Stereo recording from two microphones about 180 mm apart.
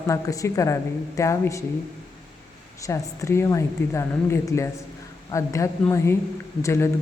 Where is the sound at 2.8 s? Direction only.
15° left (ahead or behind).